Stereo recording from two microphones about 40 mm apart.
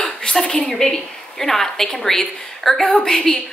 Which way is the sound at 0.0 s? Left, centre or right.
Left.